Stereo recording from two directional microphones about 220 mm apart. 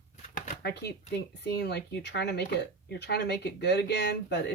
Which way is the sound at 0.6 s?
50° left (ahead or behind).